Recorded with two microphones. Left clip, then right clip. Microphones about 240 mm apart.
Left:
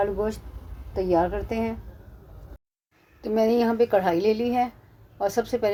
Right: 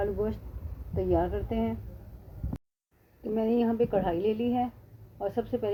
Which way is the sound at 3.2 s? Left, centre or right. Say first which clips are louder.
Left 6 dB; left.